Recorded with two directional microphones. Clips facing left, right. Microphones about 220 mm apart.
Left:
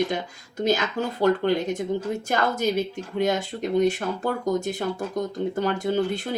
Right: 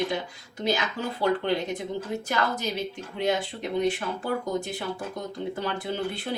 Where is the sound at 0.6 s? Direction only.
45° left (ahead or behind).